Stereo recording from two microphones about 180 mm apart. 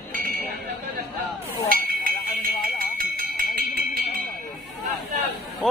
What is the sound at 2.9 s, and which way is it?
Cowbell, 55° right (ahead or behind).